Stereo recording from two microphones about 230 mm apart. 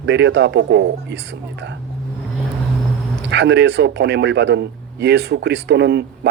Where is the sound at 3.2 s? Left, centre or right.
Right.